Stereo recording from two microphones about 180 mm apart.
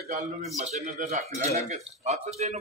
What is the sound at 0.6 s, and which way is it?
A man's voice, 40° right (ahead or behind).